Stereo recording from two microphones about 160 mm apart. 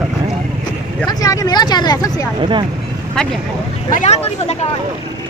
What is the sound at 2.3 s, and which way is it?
Speech, 30° right (ahead or behind).